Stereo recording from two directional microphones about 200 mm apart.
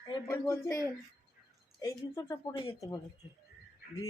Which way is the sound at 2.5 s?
25° left (ahead or behind).